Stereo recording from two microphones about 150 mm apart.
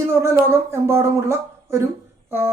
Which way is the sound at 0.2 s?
20° right (ahead or behind).